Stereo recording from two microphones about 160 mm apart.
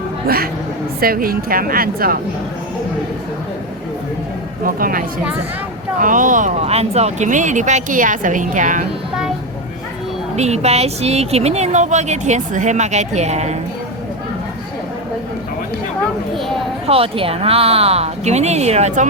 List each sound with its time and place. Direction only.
1.0 s a woman's voice: 65° right (ahead or behind)
4.6 s a woman's voice: 60° right (ahead or behind)
10.3 s speech: 45° right (ahead or behind)
16.8 s a woman's voice: 35° right (ahead or behind)